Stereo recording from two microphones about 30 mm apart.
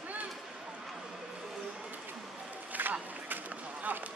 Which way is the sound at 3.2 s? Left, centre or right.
Right.